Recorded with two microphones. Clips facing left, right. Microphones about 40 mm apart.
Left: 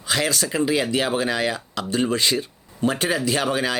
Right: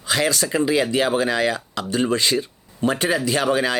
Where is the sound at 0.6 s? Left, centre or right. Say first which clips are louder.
Right 2 dB; right.